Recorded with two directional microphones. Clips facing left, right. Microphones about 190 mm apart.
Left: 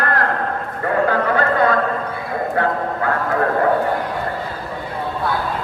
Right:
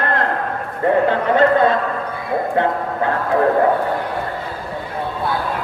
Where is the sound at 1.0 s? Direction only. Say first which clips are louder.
Right 3 dB; 25° right (ahead or behind).